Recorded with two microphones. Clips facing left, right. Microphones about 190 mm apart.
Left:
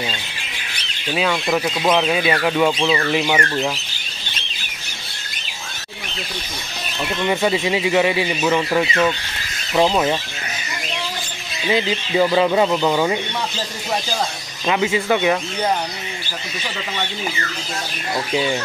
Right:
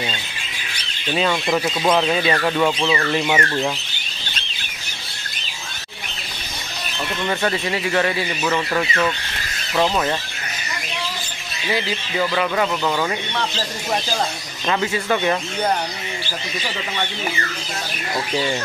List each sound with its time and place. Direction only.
1.1 s speech: centre (ahead or behind)
7.2 s speech: 10° left (ahead or behind)
11.7 s speech: 20° left (ahead or behind)
14.7 s speech: 10° left (ahead or behind)
18.3 s speech: 10° left (ahead or behind)